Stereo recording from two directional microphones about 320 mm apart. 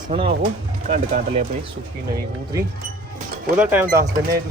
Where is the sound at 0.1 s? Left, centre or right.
Centre.